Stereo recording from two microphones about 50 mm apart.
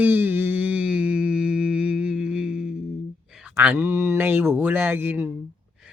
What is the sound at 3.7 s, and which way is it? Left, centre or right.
Speech, right.